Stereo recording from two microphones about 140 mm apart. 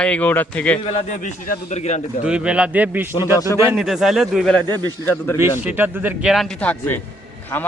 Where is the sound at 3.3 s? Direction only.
25° left (ahead or behind).